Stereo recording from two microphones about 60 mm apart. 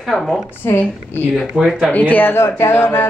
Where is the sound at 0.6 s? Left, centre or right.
Left.